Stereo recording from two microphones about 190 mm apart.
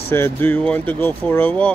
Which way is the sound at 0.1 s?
10° left (ahead or behind).